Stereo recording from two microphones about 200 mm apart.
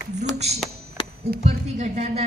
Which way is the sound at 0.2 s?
35° right (ahead or behind).